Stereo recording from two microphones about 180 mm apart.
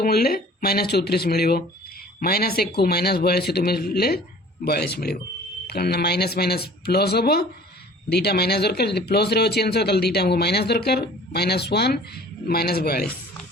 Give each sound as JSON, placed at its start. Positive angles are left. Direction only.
{"t": 0.0, "sound": "speech", "side_deg": 60}